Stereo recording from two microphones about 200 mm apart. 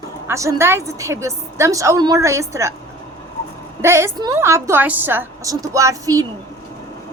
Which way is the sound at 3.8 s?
15° right (ahead or behind).